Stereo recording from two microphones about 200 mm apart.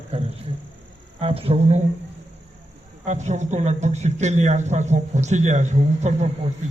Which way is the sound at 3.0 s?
35° right (ahead or behind).